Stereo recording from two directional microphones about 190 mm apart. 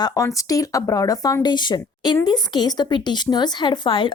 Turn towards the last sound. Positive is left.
turn(degrees=25)  # may be behind; listen again after turning